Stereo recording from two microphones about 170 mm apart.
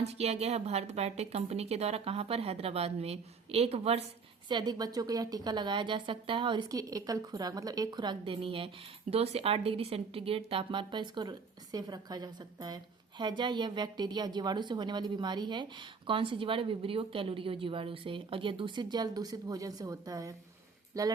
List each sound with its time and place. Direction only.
0.0 s a woman's voice: 40° right (ahead or behind)
4.4 s a woman's voice: 25° right (ahead or behind)